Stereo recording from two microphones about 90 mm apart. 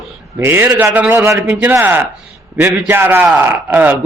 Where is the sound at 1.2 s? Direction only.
30° right (ahead or behind).